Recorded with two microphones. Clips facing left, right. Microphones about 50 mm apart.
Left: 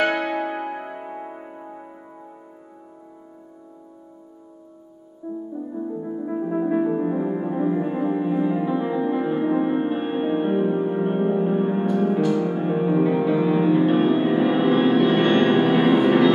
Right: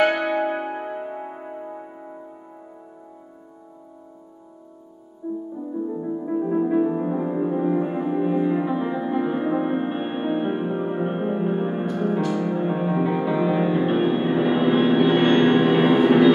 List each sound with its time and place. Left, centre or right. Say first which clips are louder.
0.0 s music: right 2 dB; centre
5.2 s music: right 2 dB; centre
5.9 s music: right 2 dB; centre